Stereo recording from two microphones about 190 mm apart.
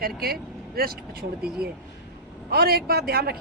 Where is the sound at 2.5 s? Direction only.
55° right (ahead or behind).